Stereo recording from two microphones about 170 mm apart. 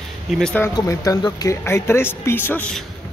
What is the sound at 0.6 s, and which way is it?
Speech, 20° left (ahead or behind).